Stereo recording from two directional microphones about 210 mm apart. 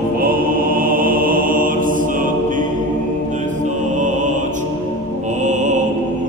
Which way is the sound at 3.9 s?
35° right (ahead or behind).